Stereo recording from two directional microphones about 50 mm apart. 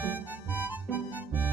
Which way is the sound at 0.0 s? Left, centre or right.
Right.